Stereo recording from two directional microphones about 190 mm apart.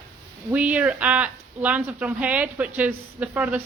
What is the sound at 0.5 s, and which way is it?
Speech, 5° right (ahead or behind).